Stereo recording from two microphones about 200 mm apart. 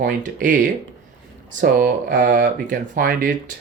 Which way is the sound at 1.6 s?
45° right (ahead or behind).